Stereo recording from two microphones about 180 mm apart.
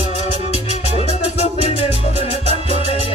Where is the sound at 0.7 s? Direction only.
35° left (ahead or behind).